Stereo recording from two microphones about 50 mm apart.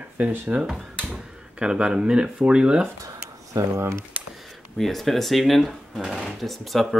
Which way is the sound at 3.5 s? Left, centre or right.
Right.